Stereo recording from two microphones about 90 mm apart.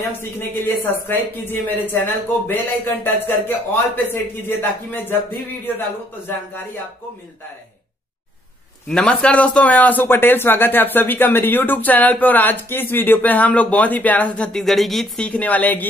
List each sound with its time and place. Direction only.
0.2 s speech: 25° left (ahead or behind)
8.8 s speech: 5° left (ahead or behind)
15.2 s a woman's voice: 15° left (ahead or behind)